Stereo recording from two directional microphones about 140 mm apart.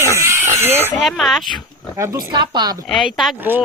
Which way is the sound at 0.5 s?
15° right (ahead or behind).